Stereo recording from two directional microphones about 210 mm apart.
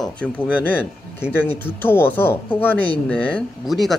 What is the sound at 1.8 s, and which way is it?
Speech, 10° left (ahead or behind).